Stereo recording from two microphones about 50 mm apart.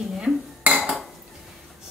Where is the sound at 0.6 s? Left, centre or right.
Right.